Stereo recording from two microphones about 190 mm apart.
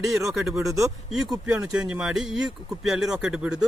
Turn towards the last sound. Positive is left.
turn(degrees=-5)  # may be behind; listen again after turning